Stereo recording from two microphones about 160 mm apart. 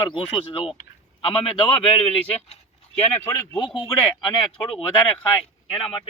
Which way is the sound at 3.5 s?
30° left (ahead or behind).